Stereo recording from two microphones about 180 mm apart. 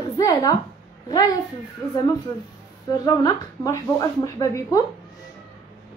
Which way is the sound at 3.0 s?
20° left (ahead or behind).